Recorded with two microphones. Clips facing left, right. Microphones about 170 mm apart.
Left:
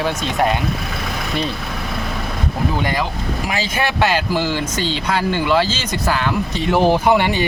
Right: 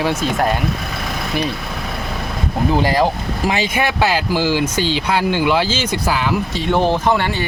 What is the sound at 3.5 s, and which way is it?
Speech, 15° right (ahead or behind).